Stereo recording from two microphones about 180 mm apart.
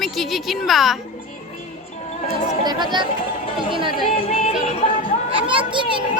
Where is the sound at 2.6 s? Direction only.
25° right (ahead or behind).